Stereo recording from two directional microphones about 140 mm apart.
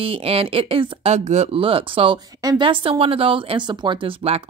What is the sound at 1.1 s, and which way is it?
A woman's voice, 55° right (ahead or behind).